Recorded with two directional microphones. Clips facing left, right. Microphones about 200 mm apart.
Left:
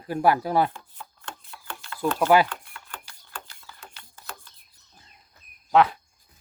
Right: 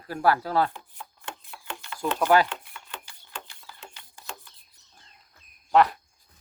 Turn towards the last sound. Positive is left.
turn(degrees=0)  # may be behind; listen again after turning